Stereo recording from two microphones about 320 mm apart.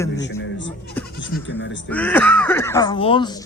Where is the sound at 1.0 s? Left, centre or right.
Centre.